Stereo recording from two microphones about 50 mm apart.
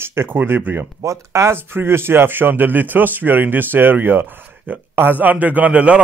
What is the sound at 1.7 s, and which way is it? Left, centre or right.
A man's voice, right.